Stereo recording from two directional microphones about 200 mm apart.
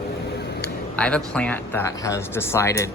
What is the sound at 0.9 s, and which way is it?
Speech, 5° left (ahead or behind).